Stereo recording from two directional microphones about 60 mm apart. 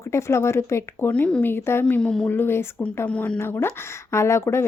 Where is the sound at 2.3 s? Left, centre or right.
Left.